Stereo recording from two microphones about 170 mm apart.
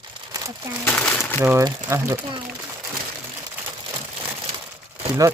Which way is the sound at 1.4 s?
15° right (ahead or behind).